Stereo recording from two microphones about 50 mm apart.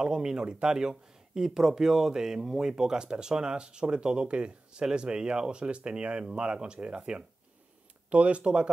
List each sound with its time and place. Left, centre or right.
0.0 s speech: centre